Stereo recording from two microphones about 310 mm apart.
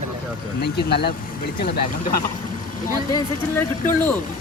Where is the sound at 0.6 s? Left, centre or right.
Left.